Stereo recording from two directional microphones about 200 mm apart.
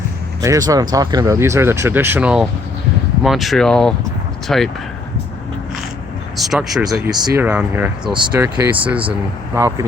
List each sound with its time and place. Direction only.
0.4 s speech: 15° right (ahead or behind); by 4.7 s centre (ahead or behind)
6.3 s speech: centre (ahead or behind)
6.8 s speech: 15° right (ahead or behind)